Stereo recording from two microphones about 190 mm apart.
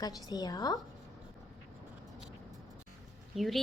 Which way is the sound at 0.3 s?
20° left (ahead or behind).